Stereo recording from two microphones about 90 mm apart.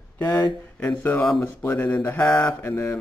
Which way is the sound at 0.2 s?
45° left (ahead or behind).